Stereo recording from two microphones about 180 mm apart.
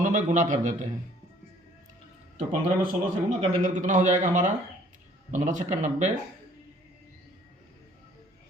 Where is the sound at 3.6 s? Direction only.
45° right (ahead or behind).